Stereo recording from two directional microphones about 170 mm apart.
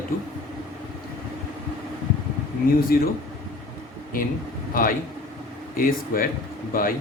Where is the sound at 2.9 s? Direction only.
60° left (ahead or behind).